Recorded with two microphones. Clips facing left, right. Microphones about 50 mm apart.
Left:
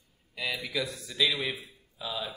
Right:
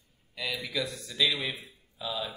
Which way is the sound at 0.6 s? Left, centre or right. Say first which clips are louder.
Even; centre.